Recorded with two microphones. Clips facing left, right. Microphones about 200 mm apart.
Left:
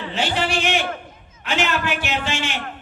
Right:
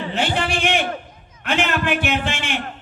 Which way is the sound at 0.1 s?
55° right (ahead or behind).